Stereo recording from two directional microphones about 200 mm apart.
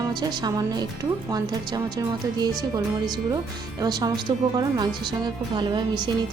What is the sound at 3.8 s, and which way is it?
Speech, 20° right (ahead or behind).